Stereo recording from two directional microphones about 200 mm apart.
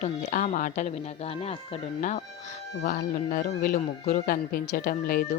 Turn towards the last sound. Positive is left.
turn(degrees=50)  # may be behind; listen again after turning